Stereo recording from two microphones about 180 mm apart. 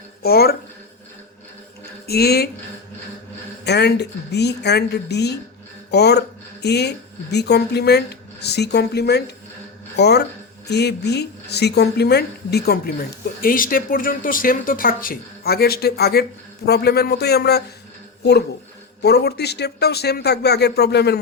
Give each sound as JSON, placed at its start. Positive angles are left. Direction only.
{"t": 0.2, "sound": "speech", "side_deg": 60}
{"t": 2.0, "sound": "speech", "side_deg": 60}
{"t": 3.6, "sound": "speech", "side_deg": 65}